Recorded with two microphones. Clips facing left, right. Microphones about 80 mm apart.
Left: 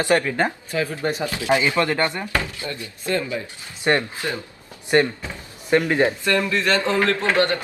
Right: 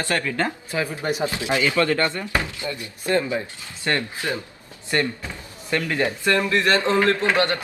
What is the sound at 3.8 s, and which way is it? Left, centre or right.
Speech, left.